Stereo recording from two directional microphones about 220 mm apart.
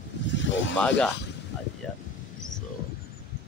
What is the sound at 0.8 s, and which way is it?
Speech, 5° left (ahead or behind).